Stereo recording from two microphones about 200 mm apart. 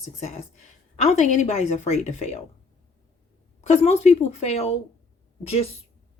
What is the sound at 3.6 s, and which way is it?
Speech, 35° left (ahead or behind).